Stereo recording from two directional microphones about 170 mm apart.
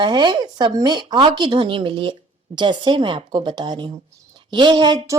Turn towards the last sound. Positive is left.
turn(degrees=-25)  # may be behind; listen again after turning